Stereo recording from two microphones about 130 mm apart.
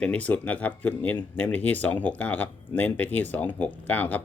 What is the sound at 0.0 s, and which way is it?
Speech, 10° left (ahead or behind).